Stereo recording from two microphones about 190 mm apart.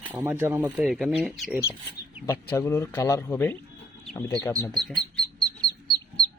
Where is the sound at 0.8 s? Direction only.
Centre (ahead or behind).